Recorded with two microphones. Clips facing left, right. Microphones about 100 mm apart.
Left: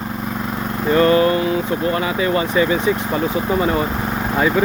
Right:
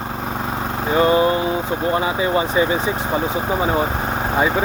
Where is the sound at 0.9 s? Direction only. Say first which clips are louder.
Left 2 dB; 15° right (ahead or behind).